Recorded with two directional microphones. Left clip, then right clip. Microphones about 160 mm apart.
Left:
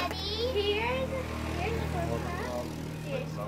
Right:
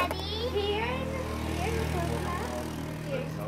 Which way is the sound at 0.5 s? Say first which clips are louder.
Even; 10° left (ahead or behind).